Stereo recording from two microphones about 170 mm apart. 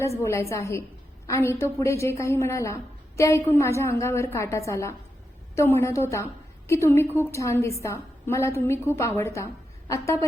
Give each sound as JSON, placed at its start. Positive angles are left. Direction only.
{"t": 0.2, "sound": "a woman's voice", "side_deg": 15}